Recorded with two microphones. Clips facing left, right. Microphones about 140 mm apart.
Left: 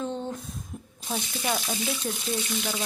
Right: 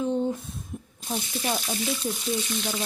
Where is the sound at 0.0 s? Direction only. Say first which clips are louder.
Right 6 dB; 15° right (ahead or behind).